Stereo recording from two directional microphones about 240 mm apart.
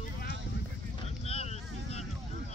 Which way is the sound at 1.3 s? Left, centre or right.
Left.